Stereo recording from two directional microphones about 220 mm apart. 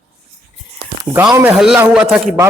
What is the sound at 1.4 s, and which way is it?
A man's voice, 5° right (ahead or behind).